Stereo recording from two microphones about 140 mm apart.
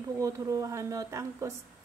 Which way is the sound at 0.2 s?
25° right (ahead or behind).